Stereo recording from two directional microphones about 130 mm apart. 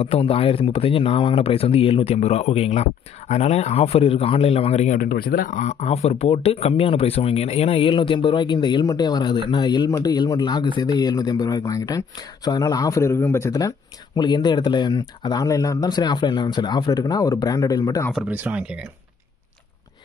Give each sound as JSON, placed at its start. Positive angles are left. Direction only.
{"t": 0.0, "sound": "speech", "side_deg": 45}
{"t": 4.9, "sound": "speech", "side_deg": 90}
{"t": 18.3, "sound": "speech", "side_deg": -15}